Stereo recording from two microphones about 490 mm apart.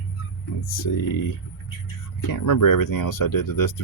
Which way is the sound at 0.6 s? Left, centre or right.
Left.